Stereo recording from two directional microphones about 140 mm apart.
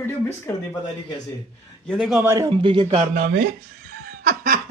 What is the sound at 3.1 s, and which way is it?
Speech, 85° right.